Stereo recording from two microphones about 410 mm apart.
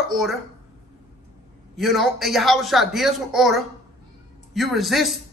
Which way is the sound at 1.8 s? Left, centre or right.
Centre.